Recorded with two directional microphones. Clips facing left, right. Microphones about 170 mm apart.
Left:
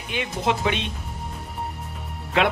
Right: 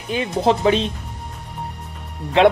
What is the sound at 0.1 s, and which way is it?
Speech, 35° right (ahead or behind).